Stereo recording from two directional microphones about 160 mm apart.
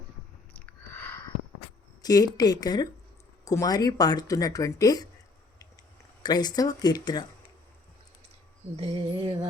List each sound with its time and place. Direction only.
0.5 s a sound: 10° left (ahead or behind)
2.0 s speech: 25° left (ahead or behind)
6.2 s speech: 25° left (ahead or behind)
8.7 s music: 35° right (ahead or behind)